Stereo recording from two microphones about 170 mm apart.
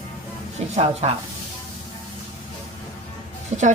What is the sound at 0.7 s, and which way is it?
Speech, 40° right (ahead or behind).